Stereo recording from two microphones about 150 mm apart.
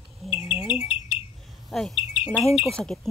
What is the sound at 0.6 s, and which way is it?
Bird, 5° right (ahead or behind).